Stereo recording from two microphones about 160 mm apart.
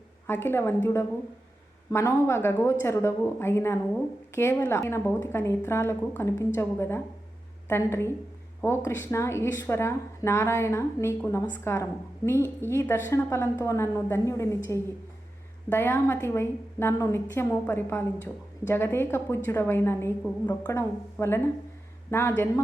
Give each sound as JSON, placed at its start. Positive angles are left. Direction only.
{"t": 0.3, "sound": "a woman's voice", "side_deg": 15}